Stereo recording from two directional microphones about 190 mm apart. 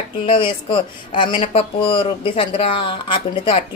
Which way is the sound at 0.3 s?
25° left (ahead or behind).